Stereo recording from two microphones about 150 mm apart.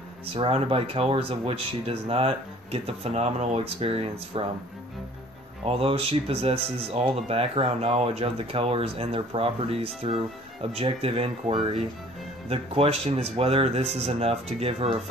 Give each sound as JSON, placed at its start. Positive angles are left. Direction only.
{"t": 0.3, "sound": "speech", "side_deg": -40}
{"t": 5.7, "sound": "speech", "side_deg": -40}